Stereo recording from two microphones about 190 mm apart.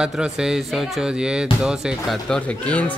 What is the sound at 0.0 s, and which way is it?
Speech, 5° right (ahead or behind).